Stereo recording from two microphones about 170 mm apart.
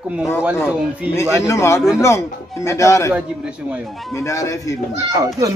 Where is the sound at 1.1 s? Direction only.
15° left (ahead or behind).